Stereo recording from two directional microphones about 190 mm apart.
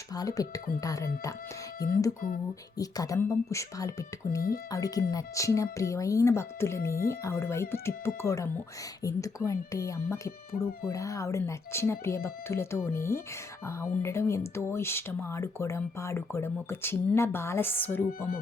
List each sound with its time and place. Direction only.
0.1 s speech: 20° left (ahead or behind)
2.7 s speech: 20° left (ahead or behind)
4.4 s speech: 50° left (ahead or behind)
4.7 s speech: 20° left (ahead or behind)